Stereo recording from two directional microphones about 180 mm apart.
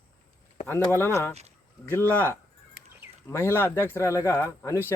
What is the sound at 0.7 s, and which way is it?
Speech, 10° left (ahead or behind).